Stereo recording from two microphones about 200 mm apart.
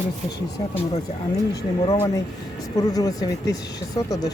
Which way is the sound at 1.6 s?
20° left (ahead or behind).